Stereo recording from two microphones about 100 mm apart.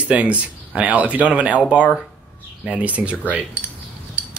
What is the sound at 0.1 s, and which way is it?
Speech, 10° right (ahead or behind).